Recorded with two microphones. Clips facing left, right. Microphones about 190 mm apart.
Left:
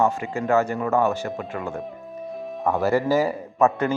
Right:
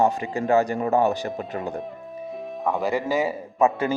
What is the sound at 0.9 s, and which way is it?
Speech, 15° right (ahead or behind).